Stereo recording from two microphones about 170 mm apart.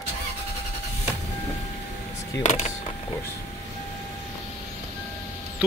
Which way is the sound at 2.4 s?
40° left (ahead or behind).